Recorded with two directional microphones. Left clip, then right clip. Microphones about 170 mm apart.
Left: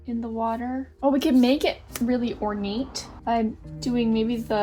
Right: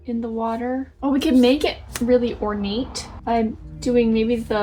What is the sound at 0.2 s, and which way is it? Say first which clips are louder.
A woman's voice: right 2 dB; 40° left (ahead or behind).